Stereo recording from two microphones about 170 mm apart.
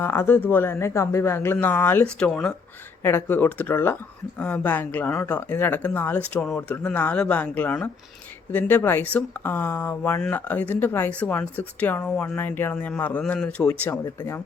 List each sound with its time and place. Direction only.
0.0 s speech: 15° left (ahead or behind)